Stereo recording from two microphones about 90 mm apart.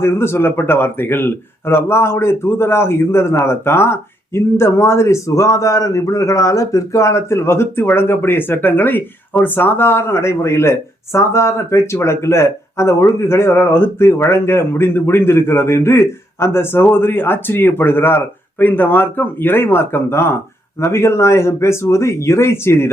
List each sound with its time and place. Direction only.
0.0 s a man's voice: 30° left (ahead or behind)